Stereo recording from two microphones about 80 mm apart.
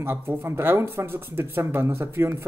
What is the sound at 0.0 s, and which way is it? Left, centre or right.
Speech, right.